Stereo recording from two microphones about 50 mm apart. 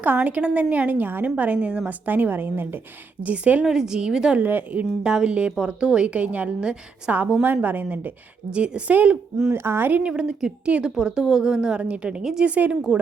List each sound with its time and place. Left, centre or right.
0.0 s a woman's voice: right
1.5 s a woman's voice: centre
1.9 s a woman's voice: right
3.2 s a woman's voice: right
3.6 s a woman's voice: centre
4.4 s a woman's voice: right
5.0 s a woman's voice: centre; by 8.1 s right
8.4 s a woman's voice: right
9.5 s speech: right
10.0 s a woman's voice: centre
12.2 s a woman's voice: centre
12.5 s a woman's voice: right